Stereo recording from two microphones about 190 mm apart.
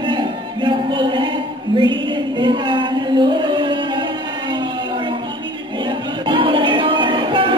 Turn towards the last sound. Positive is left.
turn(degrees=-25)  # may be behind; listen again after turning